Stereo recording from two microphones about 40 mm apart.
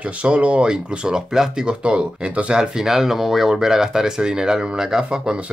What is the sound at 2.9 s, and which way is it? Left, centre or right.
Speech, centre.